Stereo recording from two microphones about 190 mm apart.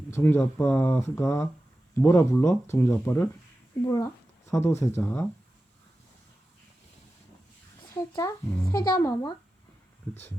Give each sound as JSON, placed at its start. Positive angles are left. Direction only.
{"t": 0.1, "sound": "speech", "side_deg": 10}
{"t": 8.2, "sound": "a child's voice", "side_deg": 15}